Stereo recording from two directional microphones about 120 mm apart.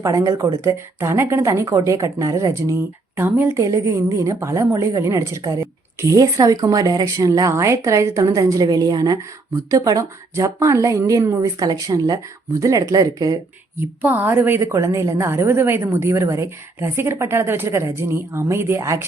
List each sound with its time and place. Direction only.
0.0 s a woman's voice: 30° right (ahead or behind)
14.0 s a woman's voice: 15° right (ahead or behind)